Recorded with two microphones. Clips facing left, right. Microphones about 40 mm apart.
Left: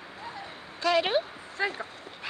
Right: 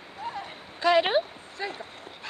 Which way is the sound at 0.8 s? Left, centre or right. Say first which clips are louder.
Right 3 dB; centre.